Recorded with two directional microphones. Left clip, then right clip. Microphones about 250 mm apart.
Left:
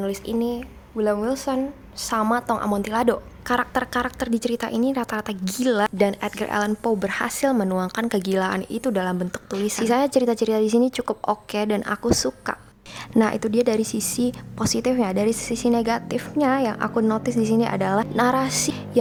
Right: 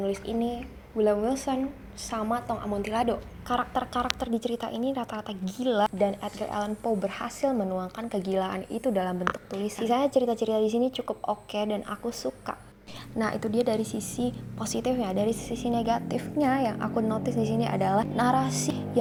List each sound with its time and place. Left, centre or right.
0.0 s a woman's voice: centre
0.3 s a woman's voice: left
0.9 s a woman's voice: centre
2.5 s a woman's voice: left
2.8 s a woman's voice: left
13.1 s a woman's voice: left
14.1 s a woman's voice: left